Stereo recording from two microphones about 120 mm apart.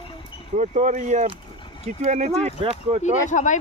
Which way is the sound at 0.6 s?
90° right.